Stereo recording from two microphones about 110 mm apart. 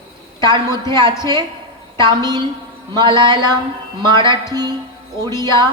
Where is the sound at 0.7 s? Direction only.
30° left (ahead or behind).